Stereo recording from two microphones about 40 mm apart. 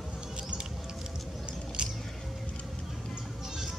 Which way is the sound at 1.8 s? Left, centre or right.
Right.